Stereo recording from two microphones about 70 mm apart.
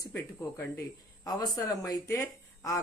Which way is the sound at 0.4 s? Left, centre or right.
Left.